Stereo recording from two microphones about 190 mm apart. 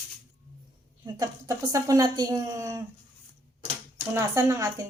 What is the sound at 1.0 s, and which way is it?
A woman's voice, 20° right (ahead or behind).